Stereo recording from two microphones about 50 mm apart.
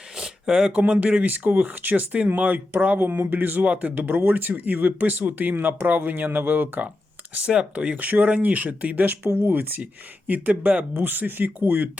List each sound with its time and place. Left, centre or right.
0.5 s speech: right
3.6 s speech: right
7.3 s speech: right
7.9 s speech: right
9.4 s speech: right
9.8 s speech: right